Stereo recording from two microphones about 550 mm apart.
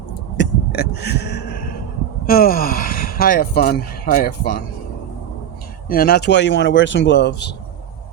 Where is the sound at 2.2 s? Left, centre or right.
Centre.